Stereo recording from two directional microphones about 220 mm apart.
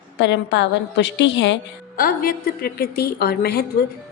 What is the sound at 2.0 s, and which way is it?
A woman's voice, 40° left (ahead or behind).